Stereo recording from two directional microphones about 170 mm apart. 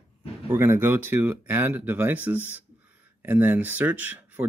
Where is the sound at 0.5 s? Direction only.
15° right (ahead or behind).